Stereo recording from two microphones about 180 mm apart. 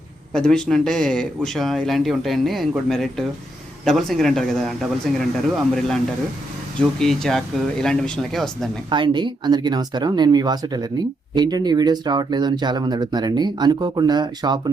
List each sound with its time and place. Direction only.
0.3 s speech: 5° left (ahead or behind)
8.9 s speech: 25° right (ahead or behind)